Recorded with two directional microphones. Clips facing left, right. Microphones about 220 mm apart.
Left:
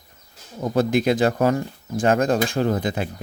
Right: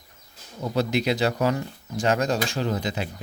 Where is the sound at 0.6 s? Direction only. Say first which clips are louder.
Left 4 dB; 50° left (ahead or behind).